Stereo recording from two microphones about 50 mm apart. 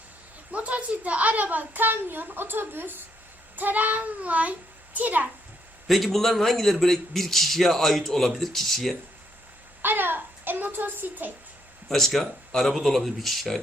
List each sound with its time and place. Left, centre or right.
0.5 s a woman's voice: right
5.9 s a man's voice: centre
9.8 s a woman's voice: right
11.9 s a man's voice: centre